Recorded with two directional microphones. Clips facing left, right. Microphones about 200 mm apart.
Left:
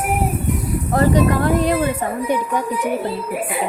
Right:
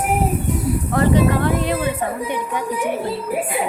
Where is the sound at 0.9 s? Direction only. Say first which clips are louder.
Left 1 dB; 40° left (ahead or behind).